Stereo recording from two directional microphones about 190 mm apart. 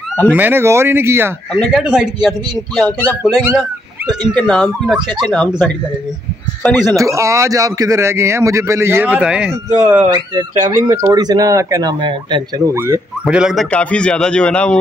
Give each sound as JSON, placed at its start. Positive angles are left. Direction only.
{"t": 0.1, "sound": "speech", "side_deg": 10}
{"t": 0.4, "sound": "a man's voice", "side_deg": -10}
{"t": 1.5, "sound": "a man's voice", "side_deg": 0}
{"t": 3.2, "sound": "a man's voice", "side_deg": -5}
{"t": 7.0, "sound": "a man's voice", "side_deg": -15}
{"t": 10.9, "sound": "speech", "side_deg": -20}
{"t": 12.7, "sound": "a man's voice", "side_deg": -10}